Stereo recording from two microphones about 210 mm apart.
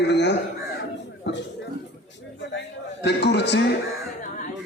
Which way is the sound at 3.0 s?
55° left (ahead or behind).